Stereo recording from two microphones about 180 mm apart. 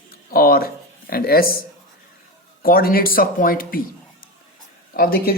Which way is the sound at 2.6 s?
55° left (ahead or behind).